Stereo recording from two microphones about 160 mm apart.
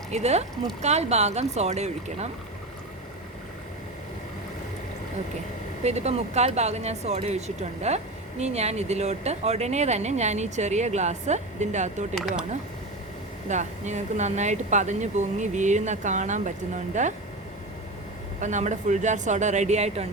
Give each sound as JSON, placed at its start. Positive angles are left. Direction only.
{"t": 0.1, "sound": "speech", "side_deg": -45}
{"t": 5.8, "sound": "speech", "side_deg": -40}
{"t": 13.5, "sound": "speech", "side_deg": -45}
{"t": 18.3, "sound": "speech", "side_deg": -50}